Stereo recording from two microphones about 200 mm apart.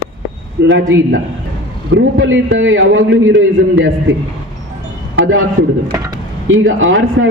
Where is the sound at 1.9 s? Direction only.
80° right.